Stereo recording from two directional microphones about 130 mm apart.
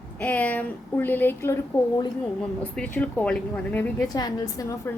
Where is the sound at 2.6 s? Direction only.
10° left (ahead or behind).